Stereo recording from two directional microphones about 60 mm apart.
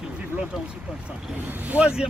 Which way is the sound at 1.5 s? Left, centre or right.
Right.